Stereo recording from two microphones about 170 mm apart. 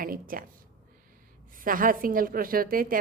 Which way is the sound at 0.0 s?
55° right (ahead or behind).